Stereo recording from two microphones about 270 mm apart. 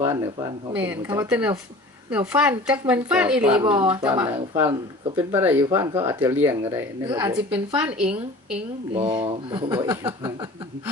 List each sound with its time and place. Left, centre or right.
0.0 s a woman's voice: centre
3.6 s a woman's voice: centre
8.9 s speech: centre